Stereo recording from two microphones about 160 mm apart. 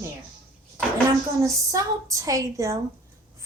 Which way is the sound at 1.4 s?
20° right (ahead or behind).